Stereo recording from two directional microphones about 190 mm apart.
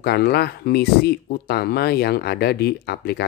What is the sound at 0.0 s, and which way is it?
Speech, 55° left (ahead or behind).